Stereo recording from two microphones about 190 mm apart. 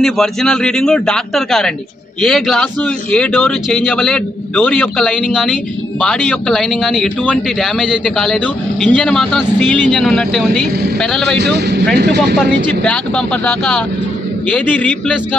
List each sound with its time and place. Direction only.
0.0 s a man's voice: centre (ahead or behind)
11.3 s speech: 60° right (ahead or behind)
12.4 s a man's voice: 5° left (ahead or behind)